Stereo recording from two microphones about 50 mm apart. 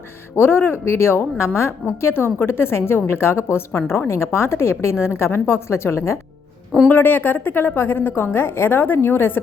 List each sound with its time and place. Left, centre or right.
0.3 s a woman's voice: left
6.8 s a woman's voice: left